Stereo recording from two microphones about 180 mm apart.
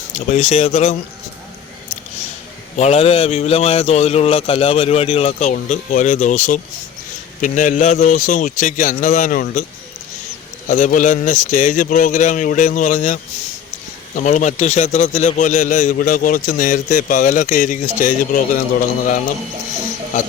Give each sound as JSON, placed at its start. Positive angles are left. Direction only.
{"t": 0.1, "sound": "a man's voice", "side_deg": 40}
{"t": 2.7, "sound": "a man's voice", "side_deg": 35}
{"t": 10.7, "sound": "a man's voice", "side_deg": 45}
{"t": 14.2, "sound": "a man's voice", "side_deg": 45}